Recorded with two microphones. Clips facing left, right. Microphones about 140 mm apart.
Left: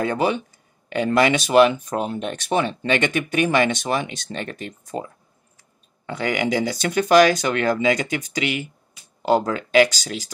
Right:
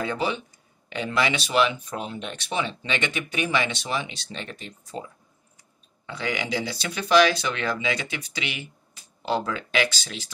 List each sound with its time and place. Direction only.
0.0 s speech: 50° left (ahead or behind)
6.0 s speech: 50° left (ahead or behind)